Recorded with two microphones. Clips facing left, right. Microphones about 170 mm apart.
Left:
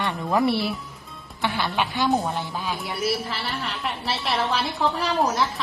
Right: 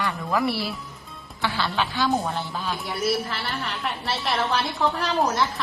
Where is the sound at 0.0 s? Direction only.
25° left (ahead or behind).